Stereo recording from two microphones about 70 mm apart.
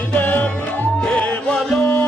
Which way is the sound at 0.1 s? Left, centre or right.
Centre.